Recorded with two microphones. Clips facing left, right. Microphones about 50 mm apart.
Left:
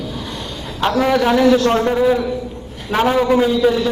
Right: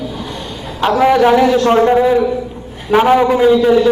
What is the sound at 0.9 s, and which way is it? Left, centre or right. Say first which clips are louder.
A man's voice: right 5 dB; centre.